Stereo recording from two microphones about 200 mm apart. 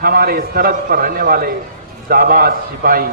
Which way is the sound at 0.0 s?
45° right (ahead or behind).